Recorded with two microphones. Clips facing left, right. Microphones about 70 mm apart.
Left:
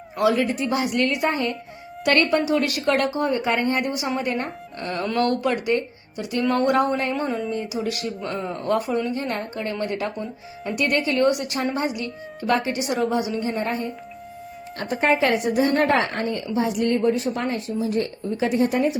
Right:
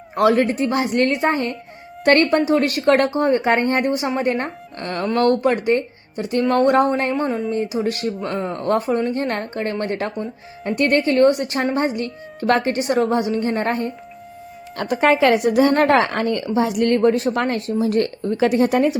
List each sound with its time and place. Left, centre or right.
0.2 s speech: right
5.1 s speech: right
14.8 s a woman's voice: right
16.6 s speech: right